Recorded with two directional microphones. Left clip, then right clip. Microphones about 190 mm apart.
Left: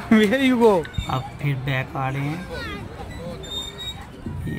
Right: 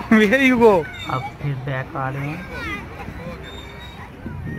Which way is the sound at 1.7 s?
15° left (ahead or behind).